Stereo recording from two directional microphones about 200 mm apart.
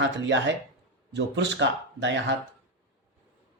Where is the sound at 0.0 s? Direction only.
65° right (ahead or behind).